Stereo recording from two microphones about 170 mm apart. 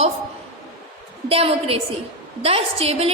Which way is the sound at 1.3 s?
35° right (ahead or behind).